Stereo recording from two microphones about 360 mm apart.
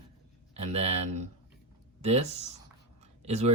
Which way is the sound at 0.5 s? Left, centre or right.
Centre.